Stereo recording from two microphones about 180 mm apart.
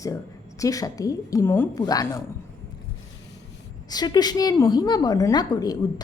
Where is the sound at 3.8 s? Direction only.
20° left (ahead or behind).